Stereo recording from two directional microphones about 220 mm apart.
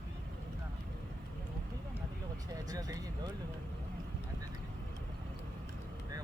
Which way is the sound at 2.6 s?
15° right (ahead or behind).